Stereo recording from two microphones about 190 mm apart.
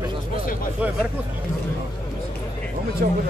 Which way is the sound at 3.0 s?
50° right (ahead or behind).